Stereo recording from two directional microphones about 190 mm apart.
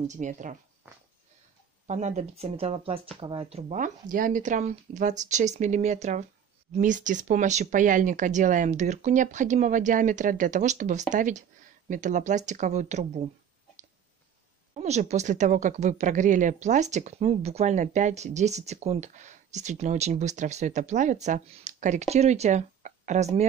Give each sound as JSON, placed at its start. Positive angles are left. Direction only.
{"t": 0.0, "sound": "a woman's voice", "side_deg": -40}
{"t": 1.9, "sound": "a woman's voice", "side_deg": -35}
{"t": 14.7, "sound": "a woman's voice", "side_deg": -35}